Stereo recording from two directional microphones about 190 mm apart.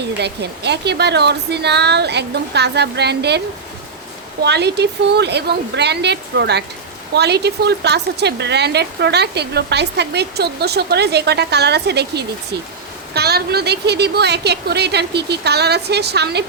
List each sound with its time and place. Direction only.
0.2 s speech: 60° right (ahead or behind)
4.4 s speech: 60° right (ahead or behind)